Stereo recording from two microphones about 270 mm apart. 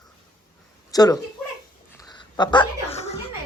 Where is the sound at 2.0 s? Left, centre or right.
Centre.